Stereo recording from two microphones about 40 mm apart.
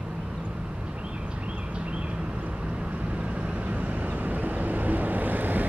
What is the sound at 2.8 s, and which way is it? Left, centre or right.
Vehicle, right.